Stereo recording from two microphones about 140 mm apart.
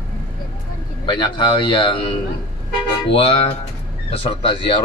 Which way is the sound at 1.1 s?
35° left (ahead or behind).